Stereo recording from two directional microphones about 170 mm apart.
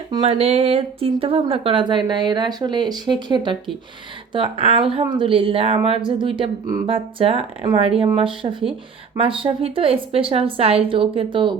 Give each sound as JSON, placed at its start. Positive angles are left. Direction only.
{"t": 0.2, "sound": "a woman's voice", "side_deg": -35}